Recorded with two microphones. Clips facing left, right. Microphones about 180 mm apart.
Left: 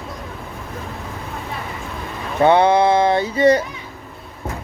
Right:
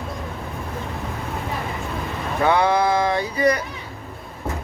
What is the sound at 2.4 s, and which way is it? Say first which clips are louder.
A man's voice: left 5 dB; 25° left (ahead or behind).